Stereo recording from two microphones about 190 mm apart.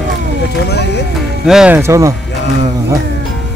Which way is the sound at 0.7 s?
60° left (ahead or behind).